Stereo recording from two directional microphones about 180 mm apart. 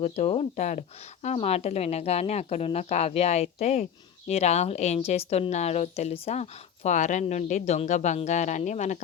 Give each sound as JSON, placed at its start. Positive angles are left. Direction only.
{"t": 0.0, "sound": "speech", "side_deg": 35}